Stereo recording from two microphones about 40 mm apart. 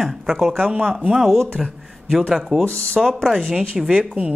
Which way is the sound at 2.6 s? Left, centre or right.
Left.